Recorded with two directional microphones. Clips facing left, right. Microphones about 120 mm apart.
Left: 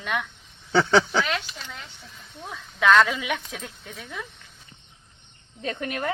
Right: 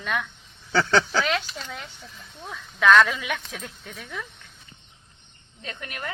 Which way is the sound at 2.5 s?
25° left (ahead or behind).